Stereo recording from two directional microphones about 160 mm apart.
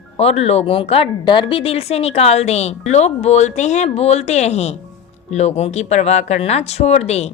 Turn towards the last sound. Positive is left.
turn(degrees=45)  # may be behind; listen again after turning